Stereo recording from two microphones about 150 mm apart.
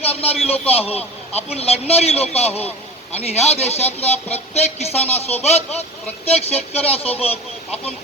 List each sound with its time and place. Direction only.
0.0 s a man's voice: 40° left (ahead or behind)